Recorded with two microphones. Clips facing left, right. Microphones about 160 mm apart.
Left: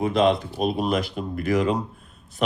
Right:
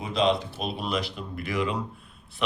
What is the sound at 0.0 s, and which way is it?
Speech, 50° left (ahead or behind).